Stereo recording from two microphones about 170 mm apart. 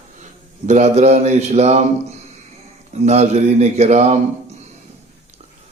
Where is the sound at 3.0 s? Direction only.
40° right (ahead or behind).